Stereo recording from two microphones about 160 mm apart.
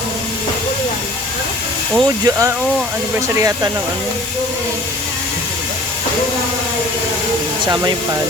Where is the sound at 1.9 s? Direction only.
20° right (ahead or behind).